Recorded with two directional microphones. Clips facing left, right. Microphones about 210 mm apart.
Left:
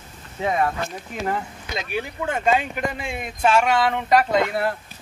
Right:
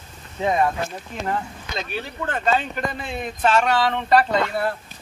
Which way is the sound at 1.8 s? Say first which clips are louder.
Left 2 dB; 10° left (ahead or behind).